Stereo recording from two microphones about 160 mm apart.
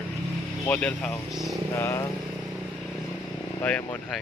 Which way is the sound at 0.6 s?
10° left (ahead or behind).